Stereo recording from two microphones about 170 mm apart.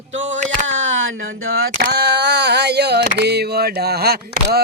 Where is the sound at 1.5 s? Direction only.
65° right (ahead or behind).